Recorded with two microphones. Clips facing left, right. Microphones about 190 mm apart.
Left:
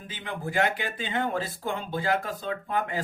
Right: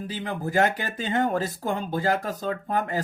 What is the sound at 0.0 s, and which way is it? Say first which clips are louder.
Speech: right 5 dB; 40° right (ahead or behind).